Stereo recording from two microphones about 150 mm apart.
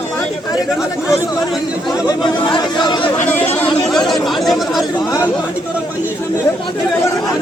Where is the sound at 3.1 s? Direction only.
15° left (ahead or behind).